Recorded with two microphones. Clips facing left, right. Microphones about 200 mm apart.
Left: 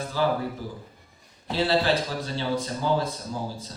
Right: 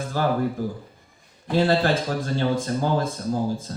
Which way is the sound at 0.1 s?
50° right (ahead or behind).